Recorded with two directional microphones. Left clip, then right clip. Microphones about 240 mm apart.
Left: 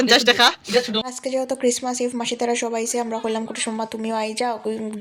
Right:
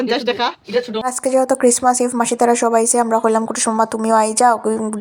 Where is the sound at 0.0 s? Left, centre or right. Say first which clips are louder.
Left 3 dB; centre.